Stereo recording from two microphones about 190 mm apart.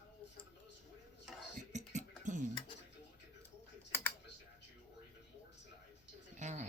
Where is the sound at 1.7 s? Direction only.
40° right (ahead or behind).